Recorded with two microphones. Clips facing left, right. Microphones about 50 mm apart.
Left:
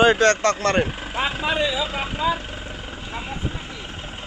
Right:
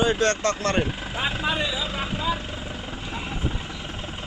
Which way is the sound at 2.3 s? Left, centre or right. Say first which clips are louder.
Left 1 dB; centre.